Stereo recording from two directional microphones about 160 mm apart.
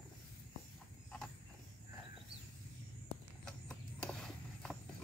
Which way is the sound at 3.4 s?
5° left (ahead or behind).